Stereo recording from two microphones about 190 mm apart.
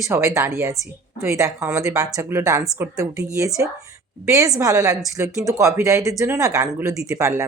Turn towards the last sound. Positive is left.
turn(degrees=-15)  # may be behind; listen again after turning